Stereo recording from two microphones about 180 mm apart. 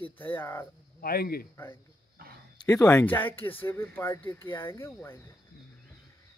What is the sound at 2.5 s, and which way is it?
Speech, 15° left (ahead or behind).